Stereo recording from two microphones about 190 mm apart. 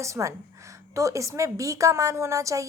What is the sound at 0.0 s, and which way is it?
A woman's voice, 15° right (ahead or behind).